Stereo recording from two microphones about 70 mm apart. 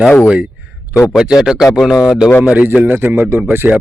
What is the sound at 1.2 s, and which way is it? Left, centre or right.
Speech, centre.